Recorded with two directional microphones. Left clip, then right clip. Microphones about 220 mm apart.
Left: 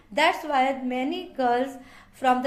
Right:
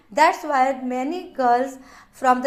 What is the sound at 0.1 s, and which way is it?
A woman's voice, 20° right (ahead or behind).